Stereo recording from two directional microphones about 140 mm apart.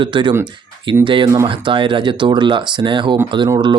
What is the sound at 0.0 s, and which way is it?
Speech, 35° right (ahead or behind).